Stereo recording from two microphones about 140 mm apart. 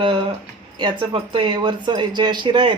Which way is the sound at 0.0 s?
35° right (ahead or behind).